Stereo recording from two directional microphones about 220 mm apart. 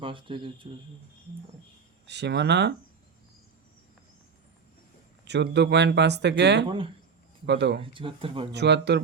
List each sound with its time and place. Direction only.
0.0 s speech: 25° right (ahead or behind)
2.0 s speech: 50° right (ahead or behind)
5.2 s speech: 50° right (ahead or behind)
6.7 s speech: 25° right (ahead or behind)
7.4 s speech: 50° right (ahead or behind)
7.8 s speech: 25° right (ahead or behind)
8.5 s speech: 50° right (ahead or behind)